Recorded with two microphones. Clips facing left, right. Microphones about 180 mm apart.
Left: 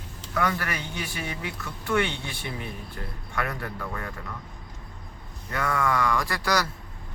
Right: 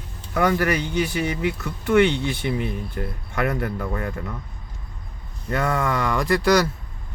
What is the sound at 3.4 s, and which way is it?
Speech, 20° right (ahead or behind).